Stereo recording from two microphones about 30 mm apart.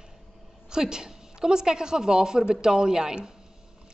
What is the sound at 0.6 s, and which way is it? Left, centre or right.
A woman's voice, right.